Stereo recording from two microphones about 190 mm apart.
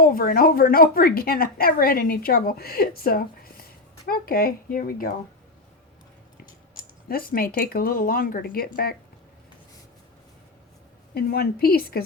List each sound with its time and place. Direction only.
0.0 s a woman's voice: 50° left (ahead or behind)
7.1 s a woman's voice: 50° left (ahead or behind)
11.1 s a woman's voice: 55° left (ahead or behind)